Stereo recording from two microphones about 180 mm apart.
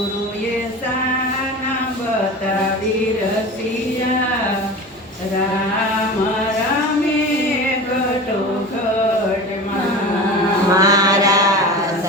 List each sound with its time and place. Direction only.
10.8 s mantra: 20° right (ahead or behind)